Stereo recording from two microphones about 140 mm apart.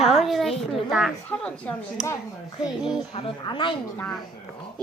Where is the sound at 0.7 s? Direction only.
Centre (ahead or behind).